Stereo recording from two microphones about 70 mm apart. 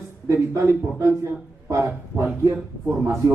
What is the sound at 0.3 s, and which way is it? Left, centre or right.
A man's voice, right.